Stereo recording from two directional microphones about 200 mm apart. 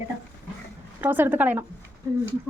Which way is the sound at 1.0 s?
10° right (ahead or behind).